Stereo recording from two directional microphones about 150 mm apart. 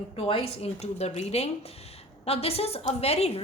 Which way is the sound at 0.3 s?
40° left (ahead or behind).